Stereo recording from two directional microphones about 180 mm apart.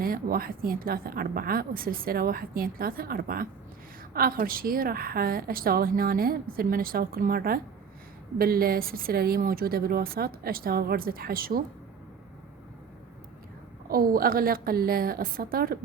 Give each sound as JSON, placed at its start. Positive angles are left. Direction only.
{"t": 0.0, "sound": "a woman's voice", "side_deg": -55}
{"t": 13.8, "sound": "a woman's voice", "side_deg": -55}